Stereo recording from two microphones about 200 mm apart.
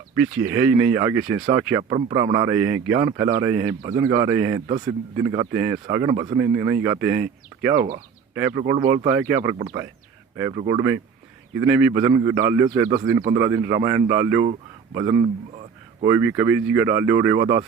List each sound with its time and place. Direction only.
0.2 s a man's voice: 10° right (ahead or behind)
10.7 s a man's voice: 15° right (ahead or behind)
15.2 s a sound: 30° right (ahead or behind)
16.0 s a man's voice: 10° right (ahead or behind)